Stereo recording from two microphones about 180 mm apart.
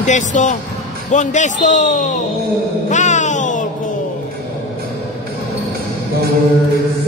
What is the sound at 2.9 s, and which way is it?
Music, 40° left (ahead or behind).